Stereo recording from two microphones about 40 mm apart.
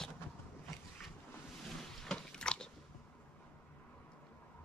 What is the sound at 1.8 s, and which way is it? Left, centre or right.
Biting, centre.